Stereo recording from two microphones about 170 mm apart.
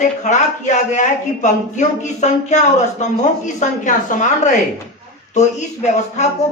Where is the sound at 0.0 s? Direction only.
45° left (ahead or behind).